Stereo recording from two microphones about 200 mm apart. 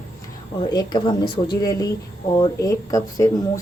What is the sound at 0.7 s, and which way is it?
Speech, 20° left (ahead or behind).